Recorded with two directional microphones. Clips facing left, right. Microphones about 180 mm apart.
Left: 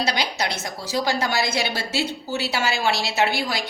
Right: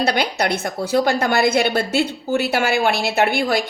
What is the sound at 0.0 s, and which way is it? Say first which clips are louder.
A woman's voice: right 5 dB; 55° right (ahead or behind).